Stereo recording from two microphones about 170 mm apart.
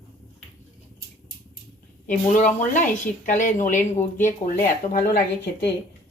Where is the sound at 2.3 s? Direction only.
45° left (ahead or behind).